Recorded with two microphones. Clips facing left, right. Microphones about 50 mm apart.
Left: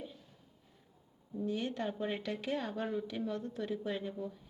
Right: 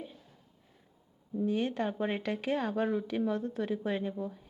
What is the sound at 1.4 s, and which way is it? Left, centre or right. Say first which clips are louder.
Speech: right 5 dB; centre.